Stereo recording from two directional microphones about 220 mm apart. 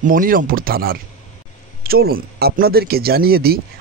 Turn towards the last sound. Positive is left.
turn(degrees=-45)  # may be behind; listen again after turning